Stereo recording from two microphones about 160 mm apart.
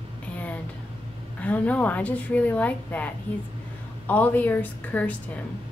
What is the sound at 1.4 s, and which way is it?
A woman's voice, 10° left (ahead or behind).